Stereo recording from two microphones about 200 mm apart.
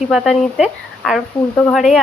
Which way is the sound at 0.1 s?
Centre (ahead or behind).